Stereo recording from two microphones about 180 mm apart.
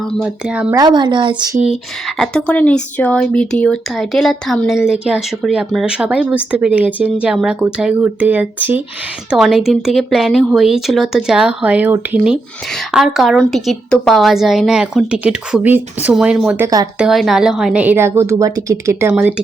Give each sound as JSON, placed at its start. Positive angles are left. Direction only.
{"t": 0.0, "sound": "speech", "side_deg": 0}
{"t": 0.8, "sound": "speech", "side_deg": -25}
{"t": 1.6, "sound": "speech", "side_deg": 0}
{"t": 16.6, "sound": "speech", "side_deg": -20}
{"t": 17.0, "sound": "a woman's voice", "side_deg": 0}